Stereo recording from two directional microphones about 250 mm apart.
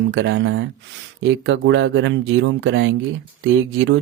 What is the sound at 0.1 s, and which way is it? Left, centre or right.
Speech, right.